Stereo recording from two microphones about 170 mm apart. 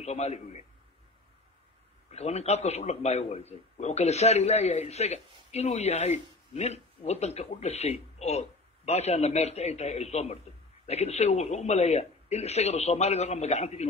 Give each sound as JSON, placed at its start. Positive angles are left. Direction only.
{"t": 0.0, "sound": "a man's voice", "side_deg": 40}
{"t": 2.0, "sound": "a man's voice", "side_deg": 40}